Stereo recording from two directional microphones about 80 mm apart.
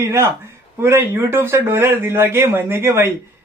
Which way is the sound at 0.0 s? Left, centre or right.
Right.